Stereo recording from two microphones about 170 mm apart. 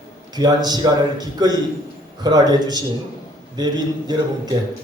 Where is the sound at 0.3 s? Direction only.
25° right (ahead or behind).